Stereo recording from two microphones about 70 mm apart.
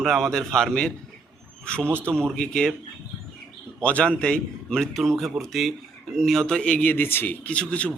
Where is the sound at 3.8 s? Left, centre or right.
Centre.